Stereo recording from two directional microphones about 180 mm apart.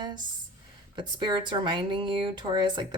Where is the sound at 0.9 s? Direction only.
25° right (ahead or behind).